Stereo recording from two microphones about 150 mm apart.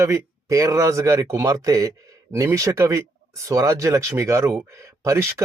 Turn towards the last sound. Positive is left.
turn(degrees=-15)  # may be behind; listen again after turning